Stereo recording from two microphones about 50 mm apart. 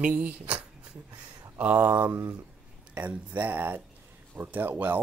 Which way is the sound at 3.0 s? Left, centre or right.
Right.